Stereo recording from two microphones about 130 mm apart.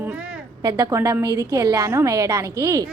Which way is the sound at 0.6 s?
30° right (ahead or behind).